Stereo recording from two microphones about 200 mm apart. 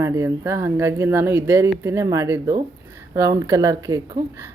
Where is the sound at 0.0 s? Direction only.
15° right (ahead or behind).